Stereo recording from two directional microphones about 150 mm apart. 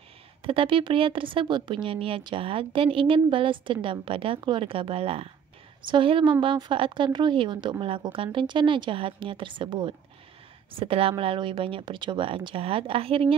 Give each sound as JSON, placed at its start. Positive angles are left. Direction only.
{"t": 0.4, "sound": "speech", "side_deg": -35}